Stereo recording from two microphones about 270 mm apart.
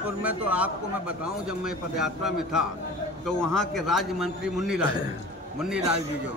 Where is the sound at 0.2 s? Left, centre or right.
Centre.